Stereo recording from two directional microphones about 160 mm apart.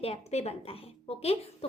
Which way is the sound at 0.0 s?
40° left (ahead or behind).